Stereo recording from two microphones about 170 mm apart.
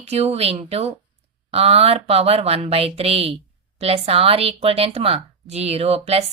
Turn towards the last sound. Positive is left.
turn(degrees=-35)  # may be behind; listen again after turning